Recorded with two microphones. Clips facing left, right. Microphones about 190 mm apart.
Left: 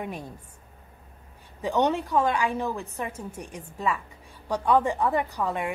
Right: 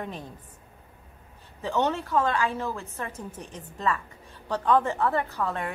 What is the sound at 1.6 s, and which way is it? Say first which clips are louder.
A woman's voice: left 2 dB; 15° left (ahead or behind).